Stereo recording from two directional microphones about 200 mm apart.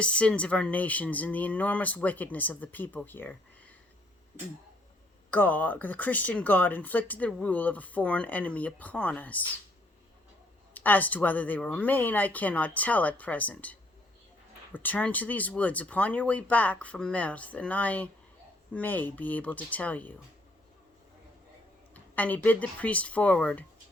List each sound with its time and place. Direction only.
0.0 s speech: 5° left (ahead or behind)
5.3 s speech: 10° left (ahead or behind)
10.8 s speech: 10° left (ahead or behind)
21.9 s speech: 10° left (ahead or behind)